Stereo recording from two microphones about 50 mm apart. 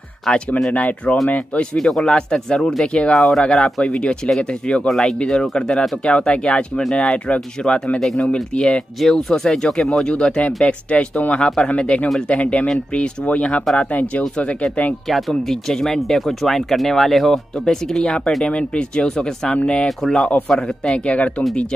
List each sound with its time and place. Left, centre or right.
0.3 s speech: centre
0.7 s speech: left
1.8 s speech: centre
3.8 s speech: centre
4.8 s speech: centre; by 14.2 s left
15.0 s speech: centre; by 19.9 s left
20.0 s speech: centre; by 21.5 s left